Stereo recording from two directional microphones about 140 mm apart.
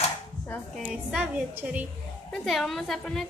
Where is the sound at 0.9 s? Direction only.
5° right (ahead or behind).